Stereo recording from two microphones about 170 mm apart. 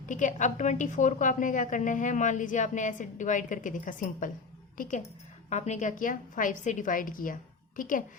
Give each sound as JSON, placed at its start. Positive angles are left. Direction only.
{"t": 0.0, "sound": "a woman's voice", "side_deg": 50}